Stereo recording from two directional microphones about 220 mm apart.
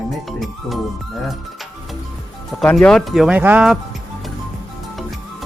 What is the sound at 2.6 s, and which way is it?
Speech, 5° left (ahead or behind).